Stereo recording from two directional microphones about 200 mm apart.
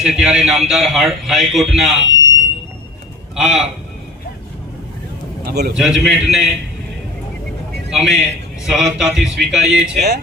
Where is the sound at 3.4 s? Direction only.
5° right (ahead or behind).